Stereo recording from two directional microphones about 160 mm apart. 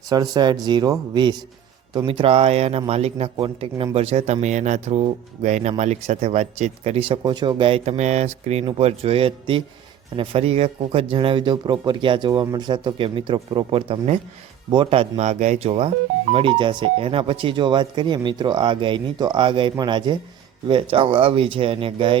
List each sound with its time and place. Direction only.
0.1 s a man's voice: 25° right (ahead or behind)
7.2 s speech: 30° right (ahead or behind)